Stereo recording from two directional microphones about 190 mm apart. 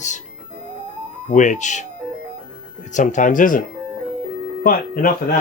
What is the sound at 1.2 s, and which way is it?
Speech, 40° left (ahead or behind).